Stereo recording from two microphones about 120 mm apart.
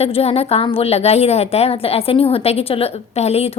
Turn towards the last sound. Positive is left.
turn(degrees=60)  # may be behind; listen again after turning